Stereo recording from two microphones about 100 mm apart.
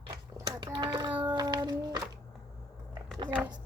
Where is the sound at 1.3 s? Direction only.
45° right (ahead or behind).